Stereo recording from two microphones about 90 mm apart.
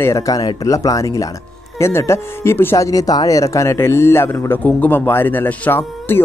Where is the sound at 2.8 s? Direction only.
40° left (ahead or behind).